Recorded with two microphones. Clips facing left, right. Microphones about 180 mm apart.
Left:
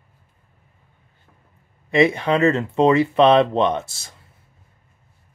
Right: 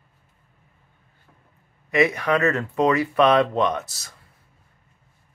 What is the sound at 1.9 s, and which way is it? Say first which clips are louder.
Speech: left 3 dB; 25° left (ahead or behind).